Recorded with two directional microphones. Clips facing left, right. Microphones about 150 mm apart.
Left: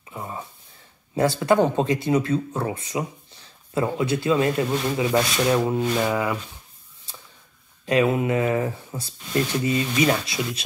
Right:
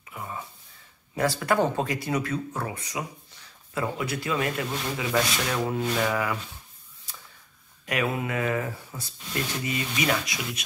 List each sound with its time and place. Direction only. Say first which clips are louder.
0.1 s a sound: left 3 dB; 25° left (ahead or behind)
1.1 s speech: left 5 dB; 25° left (ahead or behind)
7.1 s mechanisms: left 2 dB; 25° left (ahead or behind)
7.8 s speech: left 8 dB; 25° left (ahead or behind)